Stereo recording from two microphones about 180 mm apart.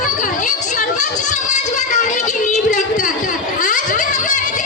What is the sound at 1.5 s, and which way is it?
Child singing, 40° left (ahead or behind).